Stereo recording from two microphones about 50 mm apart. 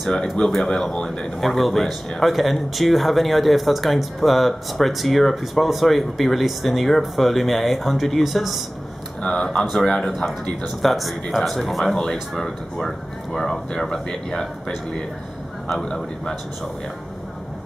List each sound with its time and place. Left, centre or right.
0.0 s speech: centre
9.2 s speech: centre